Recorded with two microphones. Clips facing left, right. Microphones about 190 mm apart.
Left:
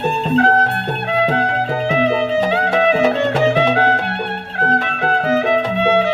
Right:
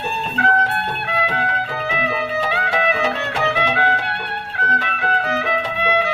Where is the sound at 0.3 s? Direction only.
40° left (ahead or behind).